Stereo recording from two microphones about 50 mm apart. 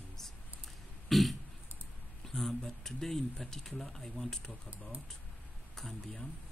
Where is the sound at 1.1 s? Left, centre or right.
Centre.